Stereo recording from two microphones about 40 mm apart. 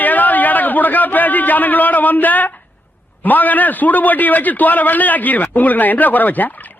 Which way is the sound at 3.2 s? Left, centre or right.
Left.